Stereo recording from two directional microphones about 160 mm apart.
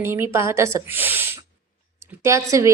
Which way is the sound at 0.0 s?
15° right (ahead or behind).